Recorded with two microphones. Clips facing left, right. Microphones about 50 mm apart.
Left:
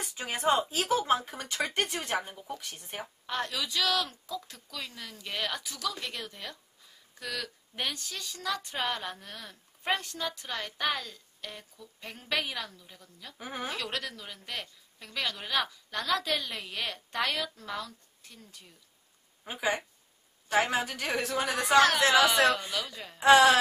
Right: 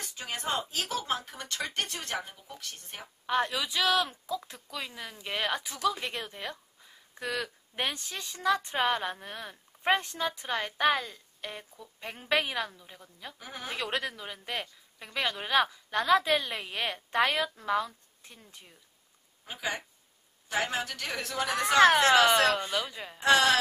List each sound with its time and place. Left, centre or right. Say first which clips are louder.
0.0 s a sound: left 3 dB; centre
0.7 s a woman's voice: left 5 dB; left
3.3 s a woman's voice: right 5 dB; centre
13.4 s a woman's voice: left 7 dB; centre
13.7 s a woman's voice: right 5 dB; right
19.4 s a woman's voice: left 4 dB; centre
21.7 s a woman's voice: right 2 dB; right
23.1 s a woman's voice: left 4 dB; centre